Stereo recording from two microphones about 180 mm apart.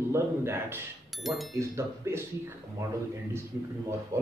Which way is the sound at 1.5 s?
15° right (ahead or behind).